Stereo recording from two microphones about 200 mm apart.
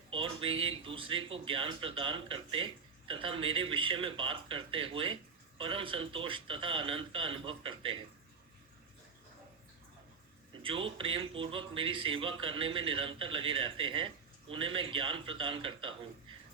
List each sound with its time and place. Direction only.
0.1 s a sound: 25° right (ahead or behind)
0.6 s speech: 25° right (ahead or behind)
10.6 s speech: 25° right (ahead or behind)